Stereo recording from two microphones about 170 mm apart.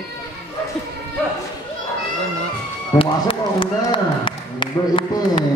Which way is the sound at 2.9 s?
30° left (ahead or behind).